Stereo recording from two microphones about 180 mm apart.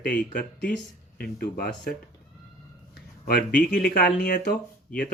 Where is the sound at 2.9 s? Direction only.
60° left (ahead or behind).